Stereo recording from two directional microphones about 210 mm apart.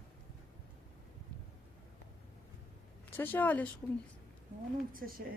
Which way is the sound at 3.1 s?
10° left (ahead or behind).